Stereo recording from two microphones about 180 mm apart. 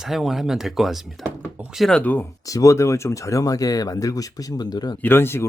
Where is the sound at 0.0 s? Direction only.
Centre (ahead or behind); by 4.9 s 20° left (ahead or behind).